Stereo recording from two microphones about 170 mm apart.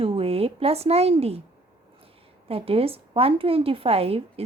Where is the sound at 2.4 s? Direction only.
35° right (ahead or behind).